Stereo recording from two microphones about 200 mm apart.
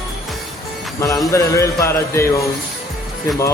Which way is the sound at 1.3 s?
15° left (ahead or behind).